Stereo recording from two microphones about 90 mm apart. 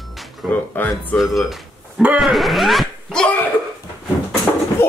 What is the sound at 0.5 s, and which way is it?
Speech, 15° left (ahead or behind).